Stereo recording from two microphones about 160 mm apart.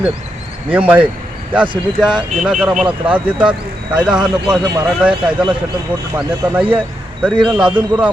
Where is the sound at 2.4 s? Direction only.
5° right (ahead or behind).